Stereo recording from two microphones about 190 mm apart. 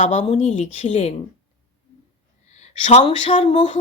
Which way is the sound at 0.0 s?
35° left (ahead or behind).